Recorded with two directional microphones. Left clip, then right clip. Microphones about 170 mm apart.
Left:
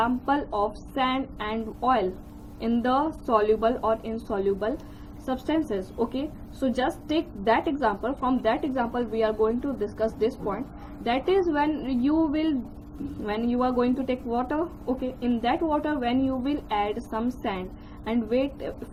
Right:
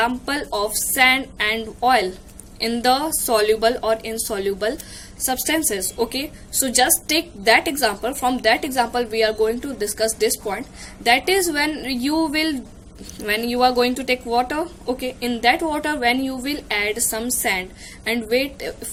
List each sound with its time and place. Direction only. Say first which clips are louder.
0.0 s a woman's voice: right 3 dB; 30° right (ahead or behind)